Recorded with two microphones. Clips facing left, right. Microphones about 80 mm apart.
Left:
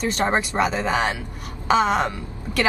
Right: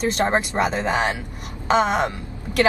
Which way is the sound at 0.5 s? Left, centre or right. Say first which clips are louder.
Even; centre.